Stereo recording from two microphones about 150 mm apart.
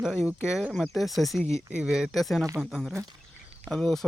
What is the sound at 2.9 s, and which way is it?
Speech, 25° right (ahead or behind).